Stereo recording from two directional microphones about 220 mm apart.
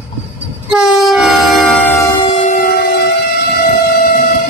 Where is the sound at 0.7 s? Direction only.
Centre (ahead or behind).